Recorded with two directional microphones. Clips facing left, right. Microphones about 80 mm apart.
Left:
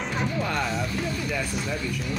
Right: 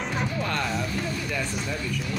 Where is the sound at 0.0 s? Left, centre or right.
Centre.